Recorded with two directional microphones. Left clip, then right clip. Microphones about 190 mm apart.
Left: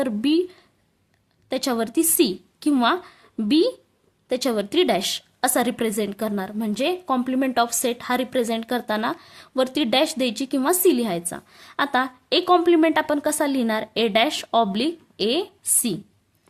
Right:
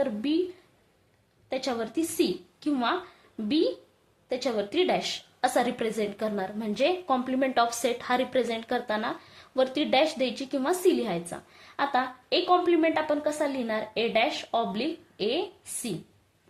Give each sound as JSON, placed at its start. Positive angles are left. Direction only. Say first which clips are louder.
{"t": 0.0, "sound": "a woman's voice", "louder": "left 5 dB", "side_deg": 45}
{"t": 1.5, "sound": "a woman's voice", "louder": "left 6 dB", "side_deg": 45}